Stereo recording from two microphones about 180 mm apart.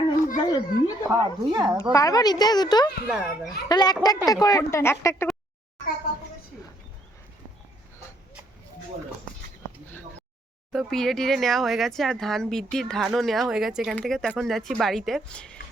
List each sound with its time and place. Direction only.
0.3 s speech: 20° left (ahead or behind)
1.1 s speech: 20° right (ahead or behind)
1.8 s a woman's voice: 15° left (ahead or behind)
3.1 s speech: 5° right (ahead or behind)
3.7 s a woman's voice: 20° left (ahead or behind)
10.7 s speech: centre (ahead or behind)